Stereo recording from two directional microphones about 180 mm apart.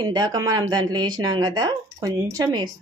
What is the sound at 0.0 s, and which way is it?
A woman's voice, 20° right (ahead or behind).